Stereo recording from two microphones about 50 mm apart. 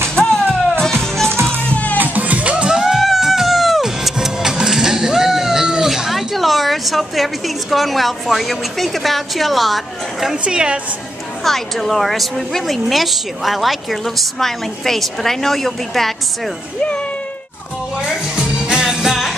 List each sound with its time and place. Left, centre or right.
0.1 s music: centre
1.6 s music: left
2.1 s music: right
2.8 s music: centre
10.3 s a woman's voice: centre
11.4 s a woman's voice: centre
17.9 s music: centre